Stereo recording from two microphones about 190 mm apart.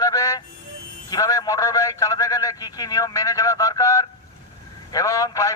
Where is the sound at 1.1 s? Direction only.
20° left (ahead or behind).